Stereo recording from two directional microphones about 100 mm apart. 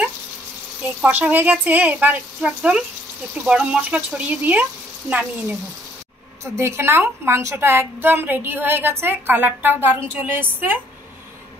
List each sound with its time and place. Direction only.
1.0 s a woman's voice: 15° right (ahead or behind)
6.4 s a woman's voice: 30° right (ahead or behind)